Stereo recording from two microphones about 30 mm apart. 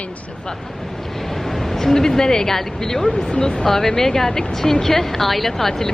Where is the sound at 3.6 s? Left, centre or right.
Centre.